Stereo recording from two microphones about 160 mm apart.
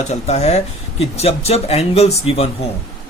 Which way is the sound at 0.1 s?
45° left (ahead or behind).